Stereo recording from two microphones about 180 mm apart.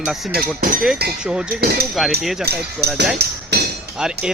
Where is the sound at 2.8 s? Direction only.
60° right (ahead or behind).